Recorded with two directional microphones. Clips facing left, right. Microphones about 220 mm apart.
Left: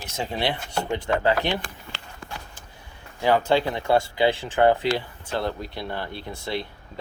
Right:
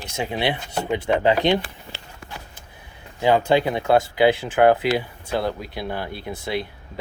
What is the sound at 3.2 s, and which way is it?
Speech, 15° right (ahead or behind).